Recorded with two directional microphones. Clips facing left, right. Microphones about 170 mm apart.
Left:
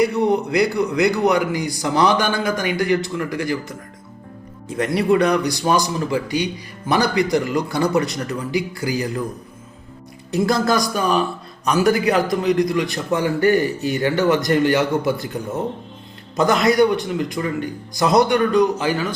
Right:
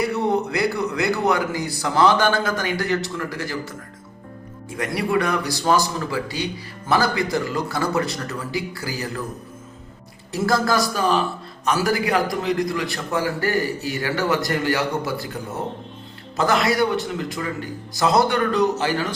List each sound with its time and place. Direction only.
0.0 s speech: 15° left (ahead or behind)
4.9 s speech: 20° left (ahead or behind)
10.3 s a man's voice: 20° left (ahead or behind)
16.3 s speech: 20° left (ahead or behind)